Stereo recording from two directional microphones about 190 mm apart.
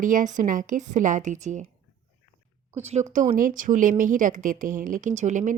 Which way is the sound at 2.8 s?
35° right (ahead or behind).